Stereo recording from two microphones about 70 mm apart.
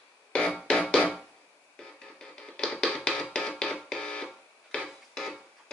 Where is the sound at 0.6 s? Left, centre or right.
Centre.